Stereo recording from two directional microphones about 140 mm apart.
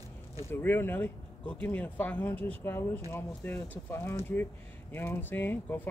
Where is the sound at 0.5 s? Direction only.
15° left (ahead or behind).